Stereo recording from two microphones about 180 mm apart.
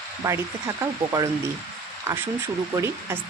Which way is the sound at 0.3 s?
15° right (ahead or behind).